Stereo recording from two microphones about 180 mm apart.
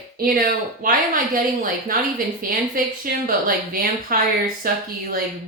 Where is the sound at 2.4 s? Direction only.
50° right (ahead or behind).